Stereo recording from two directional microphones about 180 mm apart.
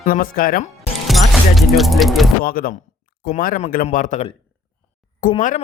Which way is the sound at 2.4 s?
50° left (ahead or behind).